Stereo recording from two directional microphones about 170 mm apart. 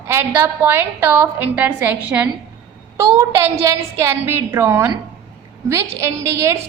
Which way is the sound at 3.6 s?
15° right (ahead or behind).